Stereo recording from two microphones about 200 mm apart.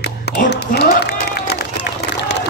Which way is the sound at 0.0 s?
55° left (ahead or behind).